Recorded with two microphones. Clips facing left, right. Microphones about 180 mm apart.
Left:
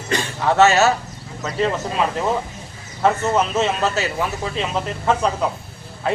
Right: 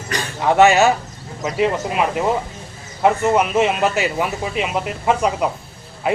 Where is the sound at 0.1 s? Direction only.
25° left (ahead or behind).